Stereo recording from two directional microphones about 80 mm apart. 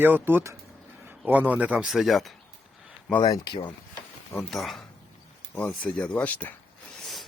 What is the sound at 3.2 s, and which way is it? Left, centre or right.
Speech, left.